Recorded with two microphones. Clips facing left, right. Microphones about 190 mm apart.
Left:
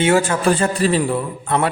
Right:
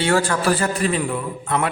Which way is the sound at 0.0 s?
20° left (ahead or behind).